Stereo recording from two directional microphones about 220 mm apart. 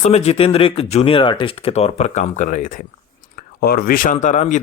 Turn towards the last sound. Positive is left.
turn(degrees=35)  # may be behind; listen again after turning